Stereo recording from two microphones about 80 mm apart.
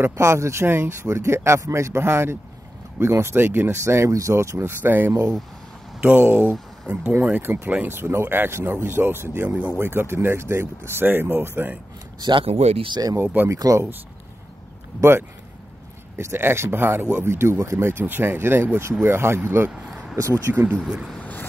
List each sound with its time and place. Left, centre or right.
0.0 s speech: right
5.9 s speech: centre
12.2 s speech: right
13.2 s speech: right
13.5 s speech: right
15.0 s speech: right
19.7 s a sound: centre
20.2 s speech: right
20.8 s speech: centre
21.2 s vehicle: left